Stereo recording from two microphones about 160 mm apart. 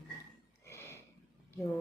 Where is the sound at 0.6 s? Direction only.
15° left (ahead or behind).